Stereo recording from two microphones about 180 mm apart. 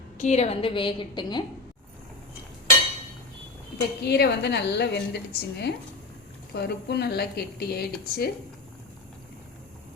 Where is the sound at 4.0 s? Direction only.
65° left (ahead or behind).